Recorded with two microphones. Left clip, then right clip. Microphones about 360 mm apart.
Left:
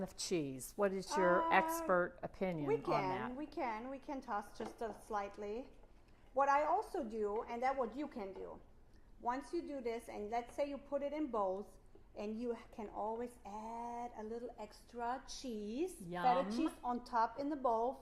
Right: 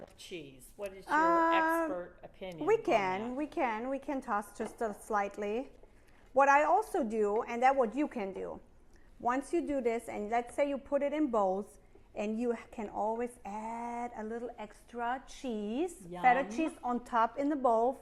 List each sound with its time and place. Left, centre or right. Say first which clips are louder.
0.3 s speech: left 6 dB; left
1.1 s female singing: right 7 dB; right
2.6 s speech: right 9 dB; right
16.8 s speech: right 7 dB; right